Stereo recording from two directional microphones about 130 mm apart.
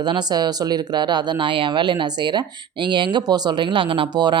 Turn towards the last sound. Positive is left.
turn(degrees=-35)  # may be behind; listen again after turning